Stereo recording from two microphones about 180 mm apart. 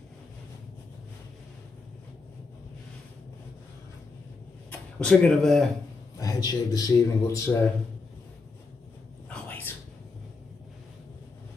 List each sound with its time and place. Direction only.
4.6 s speech: 5° left (ahead or behind)
6.1 s a man's voice: 20° left (ahead or behind)
9.3 s a sound: 10° left (ahead or behind)